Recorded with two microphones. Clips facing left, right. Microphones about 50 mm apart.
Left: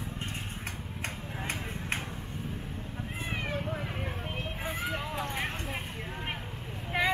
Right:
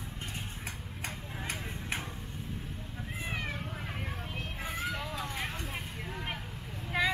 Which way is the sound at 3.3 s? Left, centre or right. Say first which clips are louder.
Left 3 dB; centre.